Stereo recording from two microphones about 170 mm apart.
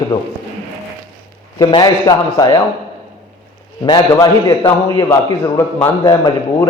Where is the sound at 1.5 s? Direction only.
25° left (ahead or behind).